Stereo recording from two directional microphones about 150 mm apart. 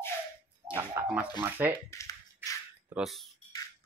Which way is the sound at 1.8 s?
20° left (ahead or behind).